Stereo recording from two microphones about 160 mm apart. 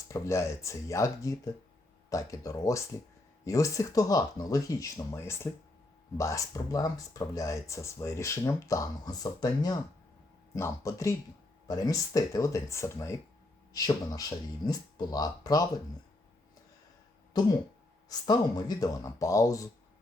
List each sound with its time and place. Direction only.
0.1 s speech: 20° left (ahead or behind)
18.1 s speech: 25° left (ahead or behind)